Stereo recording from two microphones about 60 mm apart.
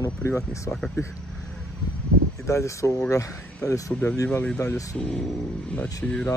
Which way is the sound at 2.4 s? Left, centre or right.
Left.